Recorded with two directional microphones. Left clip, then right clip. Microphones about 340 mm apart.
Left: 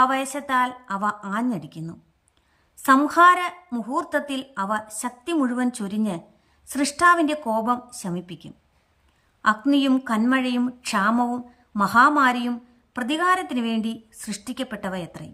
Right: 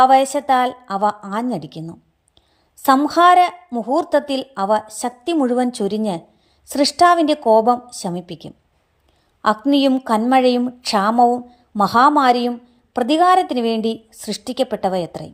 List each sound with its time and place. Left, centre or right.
0.0 s a woman's voice: centre
9.4 s a woman's voice: centre
11.2 s a woman's voice: left
11.7 s a woman's voice: centre